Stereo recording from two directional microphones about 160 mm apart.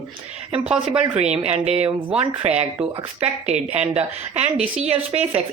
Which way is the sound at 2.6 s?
40° right (ahead or behind).